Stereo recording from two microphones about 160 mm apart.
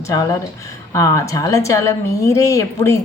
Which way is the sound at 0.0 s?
25° left (ahead or behind).